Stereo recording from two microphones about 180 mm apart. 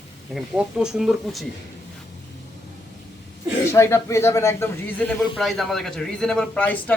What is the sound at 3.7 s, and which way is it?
Speech, 15° left (ahead or behind).